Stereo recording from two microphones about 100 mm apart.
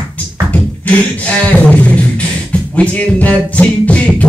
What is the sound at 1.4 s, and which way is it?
Beatboxing, 10° left (ahead or behind).